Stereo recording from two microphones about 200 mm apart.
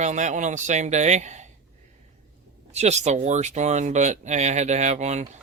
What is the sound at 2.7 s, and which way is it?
Speech, 35° right (ahead or behind).